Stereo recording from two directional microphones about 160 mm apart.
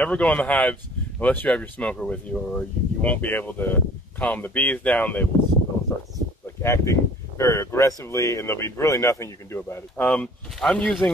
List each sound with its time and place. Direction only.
0.0 s speech: 10° left (ahead or behind)